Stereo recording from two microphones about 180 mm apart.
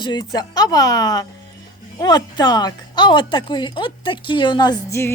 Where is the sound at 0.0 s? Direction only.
25° left (ahead or behind).